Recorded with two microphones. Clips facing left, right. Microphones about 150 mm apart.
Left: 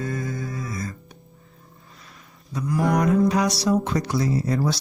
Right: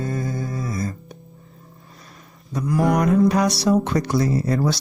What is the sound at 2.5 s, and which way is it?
Speech, 60° right (ahead or behind).